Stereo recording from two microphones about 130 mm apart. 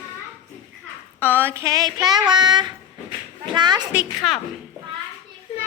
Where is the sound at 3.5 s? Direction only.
35° right (ahead or behind).